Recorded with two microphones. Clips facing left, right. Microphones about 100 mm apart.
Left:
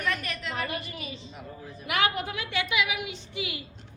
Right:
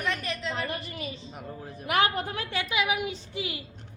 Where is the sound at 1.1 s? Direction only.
40° right (ahead or behind).